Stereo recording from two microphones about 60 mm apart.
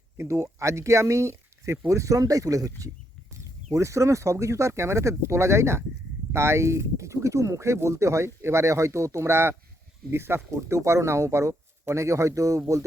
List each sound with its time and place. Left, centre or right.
0.2 s speech: right
3.3 s speech: right